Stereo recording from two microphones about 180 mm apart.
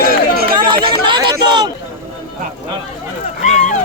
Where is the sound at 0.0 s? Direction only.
55° right (ahead or behind).